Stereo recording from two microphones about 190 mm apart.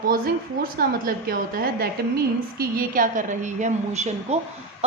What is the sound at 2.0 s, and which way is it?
A woman's voice, 55° right (ahead or behind).